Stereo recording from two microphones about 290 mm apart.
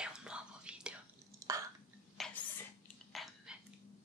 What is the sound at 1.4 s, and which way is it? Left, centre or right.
Burping, centre.